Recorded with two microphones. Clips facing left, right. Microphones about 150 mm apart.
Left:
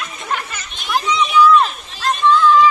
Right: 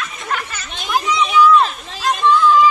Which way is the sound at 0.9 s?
10° right (ahead or behind).